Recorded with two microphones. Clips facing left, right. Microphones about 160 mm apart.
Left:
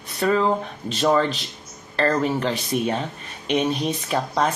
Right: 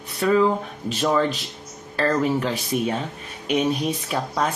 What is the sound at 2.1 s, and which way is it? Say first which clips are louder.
Speech: right 1 dB; 5° right (ahead or behind).